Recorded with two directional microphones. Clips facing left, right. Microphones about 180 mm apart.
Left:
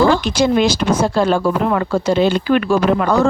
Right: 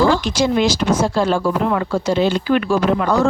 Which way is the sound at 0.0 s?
60° left (ahead or behind).